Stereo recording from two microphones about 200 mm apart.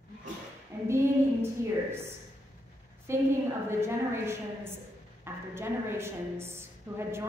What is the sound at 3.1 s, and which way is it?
A woman's voice, 15° right (ahead or behind).